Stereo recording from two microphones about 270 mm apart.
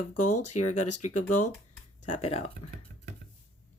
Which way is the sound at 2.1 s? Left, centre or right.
Left.